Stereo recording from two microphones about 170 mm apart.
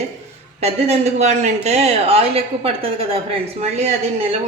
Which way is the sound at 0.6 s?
35° right (ahead or behind).